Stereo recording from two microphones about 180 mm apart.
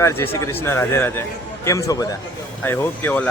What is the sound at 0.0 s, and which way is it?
A man's voice, 15° left (ahead or behind).